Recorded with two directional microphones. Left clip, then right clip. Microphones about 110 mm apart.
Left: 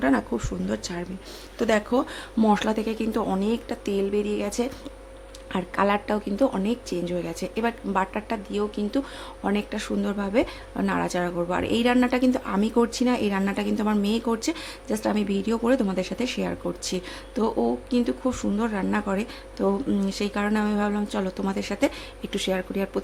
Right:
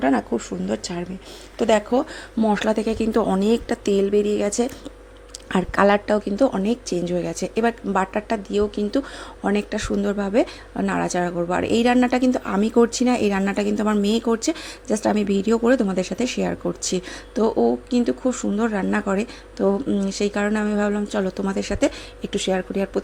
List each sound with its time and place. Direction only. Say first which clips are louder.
0.0 s a woman's voice: right 3 dB; 20° right (ahead or behind); by 3.4 s 40° right (ahead or behind)
3.4 s speech: right 7 dB; 55° right (ahead or behind); by 4.7 s 40° right (ahead or behind)
5.5 s a woman's voice: right 6 dB; 55° right (ahead or behind); by 14.3 s 35° right (ahead or behind)
14.3 s a woman's voice: right 4 dB; 25° right (ahead or behind)